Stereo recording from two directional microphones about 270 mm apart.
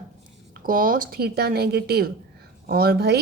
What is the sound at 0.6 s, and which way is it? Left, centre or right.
Speech, right.